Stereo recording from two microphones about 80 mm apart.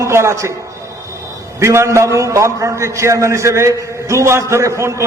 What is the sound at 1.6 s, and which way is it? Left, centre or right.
A man's voice, right.